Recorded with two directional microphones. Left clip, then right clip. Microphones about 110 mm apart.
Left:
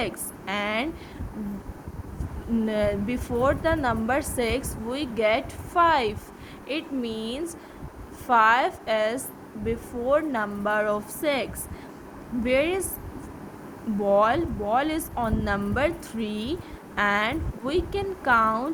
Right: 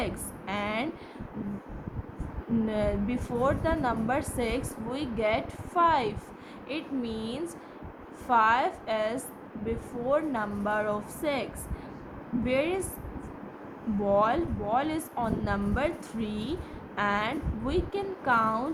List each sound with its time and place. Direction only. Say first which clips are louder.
0.0 s a sound: left 4 dB; 60° left (ahead or behind)
2.6 s a woman's voice: left 5 dB; 55° left (ahead or behind)
12.5 s speech: left 5 dB; 55° left (ahead or behind)
14.0 s speech: left 4 dB; 55° left (ahead or behind)